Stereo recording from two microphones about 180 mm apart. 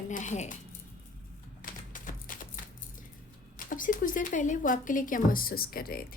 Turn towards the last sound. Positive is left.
turn(degrees=55)  # may be behind; listen again after turning